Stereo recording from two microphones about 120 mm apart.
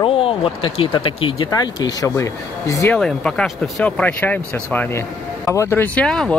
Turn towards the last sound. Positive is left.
turn(degrees=5)  # may be behind; listen again after turning